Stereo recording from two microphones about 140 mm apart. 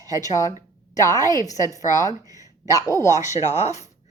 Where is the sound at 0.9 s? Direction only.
25° left (ahead or behind).